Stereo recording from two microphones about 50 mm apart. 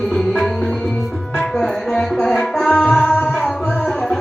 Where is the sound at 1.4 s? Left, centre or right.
Centre.